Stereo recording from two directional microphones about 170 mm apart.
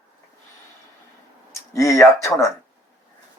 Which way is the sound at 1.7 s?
15° left (ahead or behind).